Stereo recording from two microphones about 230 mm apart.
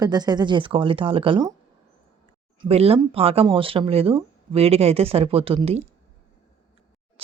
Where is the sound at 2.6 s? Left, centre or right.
Right.